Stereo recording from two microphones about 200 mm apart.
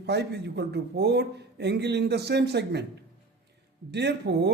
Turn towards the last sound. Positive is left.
turn(degrees=-55)  # may be behind; listen again after turning